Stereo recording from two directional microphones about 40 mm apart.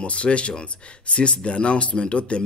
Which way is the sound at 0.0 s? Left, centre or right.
Left.